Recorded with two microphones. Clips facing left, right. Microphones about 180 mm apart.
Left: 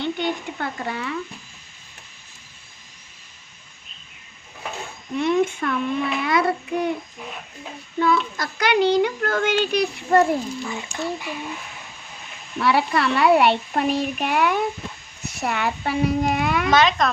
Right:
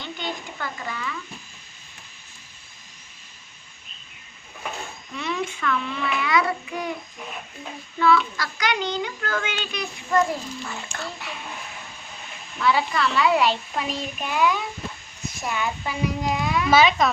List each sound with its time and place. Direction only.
0.0 s speech: 65° left (ahead or behind)
5.1 s a child's voice: 55° left (ahead or behind)
8.4 s speech: 55° left (ahead or behind)
10.7 s speech: 15° left (ahead or behind)
12.6 s a child's voice: 65° left (ahead or behind)
16.6 s speech: 5° right (ahead or behind)